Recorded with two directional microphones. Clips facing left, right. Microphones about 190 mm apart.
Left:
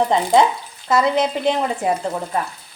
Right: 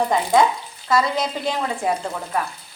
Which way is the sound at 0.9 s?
20° left (ahead or behind).